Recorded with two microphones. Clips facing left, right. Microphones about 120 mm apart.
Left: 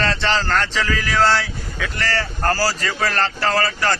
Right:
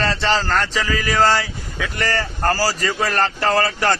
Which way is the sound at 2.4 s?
15° right (ahead or behind).